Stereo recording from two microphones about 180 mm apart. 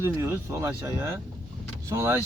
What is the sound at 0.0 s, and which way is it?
Speech, 15° right (ahead or behind).